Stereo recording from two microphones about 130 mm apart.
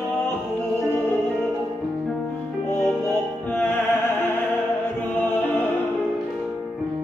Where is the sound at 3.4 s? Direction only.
15° left (ahead or behind).